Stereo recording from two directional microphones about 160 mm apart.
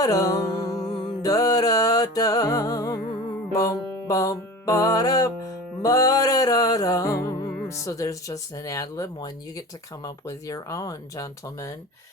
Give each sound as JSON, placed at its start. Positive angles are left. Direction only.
{"t": 0.0, "sound": "music", "side_deg": 20}
{"t": 7.3, "sound": "speech", "side_deg": 20}